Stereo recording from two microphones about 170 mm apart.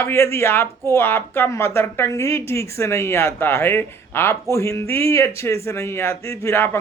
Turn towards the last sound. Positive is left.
turn(degrees=15)  # may be behind; listen again after turning